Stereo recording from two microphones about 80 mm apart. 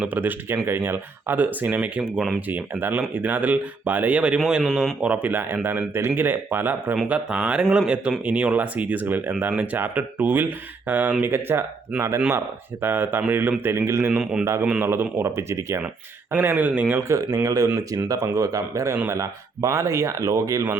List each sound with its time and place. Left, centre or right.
0.0 s speech: right
2.5 s speech: right; by 4.9 s centre
5.0 s speech: centre
7.1 s speech: centre; by 12.2 s right
12.8 s speech: right
14.1 s speech: centre
14.8 s speech: right
16.4 s speech: right
17.0 s speech: right
17.3 s speech: right